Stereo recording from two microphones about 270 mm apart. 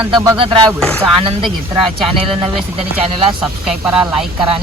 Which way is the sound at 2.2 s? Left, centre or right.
Centre.